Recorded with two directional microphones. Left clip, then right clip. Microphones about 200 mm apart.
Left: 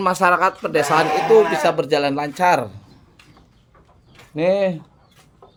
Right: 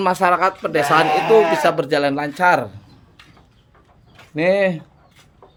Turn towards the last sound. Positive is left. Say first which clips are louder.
# right 1 dB
turn(degrees=-10)  # may be behind; listen again after turning